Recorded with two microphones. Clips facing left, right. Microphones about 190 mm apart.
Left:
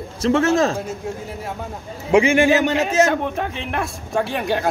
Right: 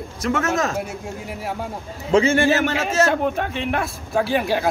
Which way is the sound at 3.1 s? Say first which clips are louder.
Right 1 dB; centre (ahead or behind).